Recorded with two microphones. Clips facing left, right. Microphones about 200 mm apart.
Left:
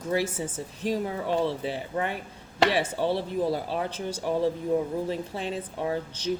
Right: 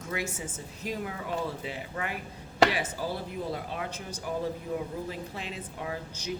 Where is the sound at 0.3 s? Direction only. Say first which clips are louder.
Left 6 dB; 30° left (ahead or behind).